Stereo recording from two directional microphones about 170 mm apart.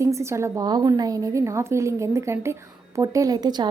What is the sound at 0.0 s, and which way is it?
A woman's voice, 15° right (ahead or behind).